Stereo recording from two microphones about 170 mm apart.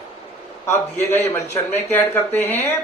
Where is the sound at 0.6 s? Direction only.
15° left (ahead or behind).